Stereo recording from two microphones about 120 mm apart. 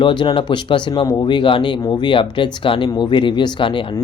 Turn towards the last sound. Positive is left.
turn(degrees=45)  # may be behind; listen again after turning